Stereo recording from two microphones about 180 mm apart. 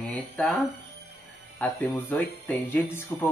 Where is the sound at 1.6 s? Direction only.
10° left (ahead or behind).